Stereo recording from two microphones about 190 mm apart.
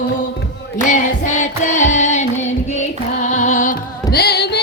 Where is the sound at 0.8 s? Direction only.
40° left (ahead or behind).